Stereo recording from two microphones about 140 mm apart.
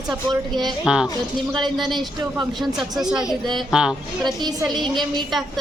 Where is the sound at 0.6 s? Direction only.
5° right (ahead or behind).